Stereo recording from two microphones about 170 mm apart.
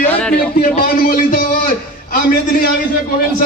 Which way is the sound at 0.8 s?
55° left (ahead or behind).